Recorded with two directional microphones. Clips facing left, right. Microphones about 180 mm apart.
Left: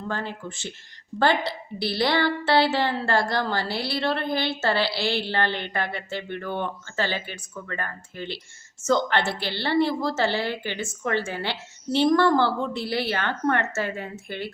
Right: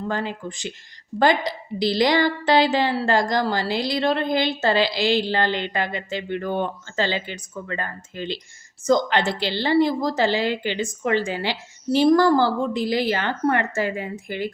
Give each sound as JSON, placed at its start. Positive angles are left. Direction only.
{"t": 0.1, "sound": "a woman's voice", "side_deg": -15}